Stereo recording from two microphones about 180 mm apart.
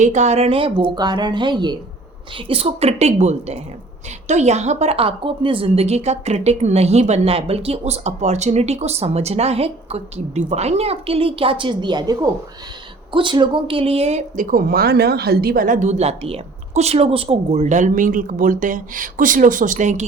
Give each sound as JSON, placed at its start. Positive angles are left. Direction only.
{"t": 0.0, "sound": "a woman's voice", "side_deg": -40}